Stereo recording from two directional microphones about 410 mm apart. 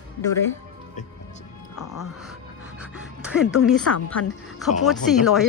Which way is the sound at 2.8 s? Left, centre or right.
Centre.